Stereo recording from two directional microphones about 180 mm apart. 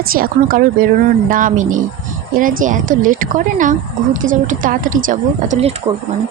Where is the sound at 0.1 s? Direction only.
55° right (ahead or behind).